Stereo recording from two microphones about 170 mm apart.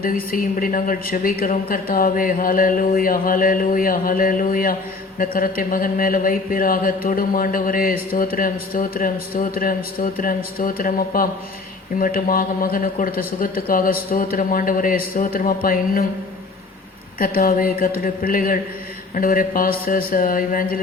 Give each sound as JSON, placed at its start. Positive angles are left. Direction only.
{"t": 0.0, "sound": "a woman's voice", "side_deg": 60}
{"t": 17.2, "sound": "a woman's voice", "side_deg": 55}